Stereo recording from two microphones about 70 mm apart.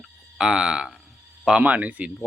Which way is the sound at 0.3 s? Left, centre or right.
Centre.